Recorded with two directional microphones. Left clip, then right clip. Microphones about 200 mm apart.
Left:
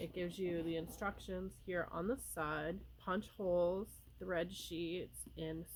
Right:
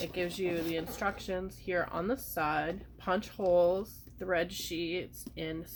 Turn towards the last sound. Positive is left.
turn(degrees=40)  # may be behind; listen again after turning